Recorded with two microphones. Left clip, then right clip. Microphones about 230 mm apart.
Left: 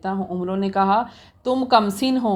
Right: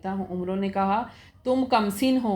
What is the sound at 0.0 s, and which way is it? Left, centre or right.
A woman's voice, left.